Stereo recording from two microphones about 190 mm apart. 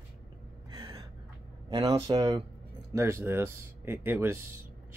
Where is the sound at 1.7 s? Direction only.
25° right (ahead or behind).